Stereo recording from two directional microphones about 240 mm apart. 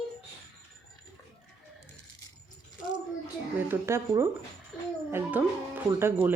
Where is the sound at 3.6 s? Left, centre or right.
Centre.